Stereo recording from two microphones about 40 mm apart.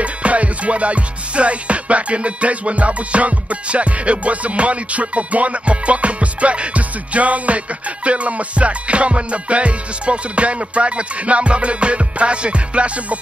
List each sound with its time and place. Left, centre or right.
0.0 s music: right